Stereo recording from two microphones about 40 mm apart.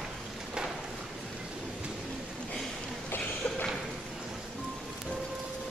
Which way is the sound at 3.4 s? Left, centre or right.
Left.